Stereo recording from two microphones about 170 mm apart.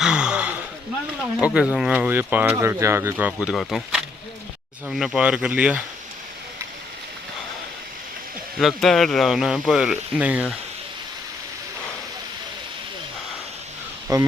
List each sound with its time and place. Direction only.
0.0 s a sound: 5° right (ahead or behind)
1.5 s speech: 5° right (ahead or behind)
8.5 s speech: centre (ahead or behind)
14.1 s speech: 20° right (ahead or behind)